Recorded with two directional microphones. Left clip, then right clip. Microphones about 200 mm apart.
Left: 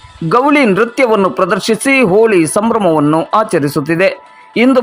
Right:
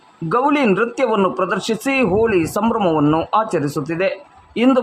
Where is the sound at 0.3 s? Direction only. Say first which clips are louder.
Left 6 dB; 15° left (ahead or behind).